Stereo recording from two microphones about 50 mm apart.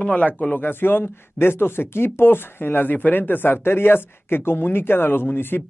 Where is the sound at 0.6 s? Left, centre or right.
Left.